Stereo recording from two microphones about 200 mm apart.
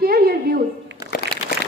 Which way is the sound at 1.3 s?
50° right (ahead or behind).